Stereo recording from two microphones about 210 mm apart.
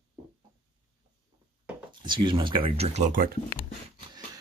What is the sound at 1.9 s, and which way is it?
Speech, 20° right (ahead or behind).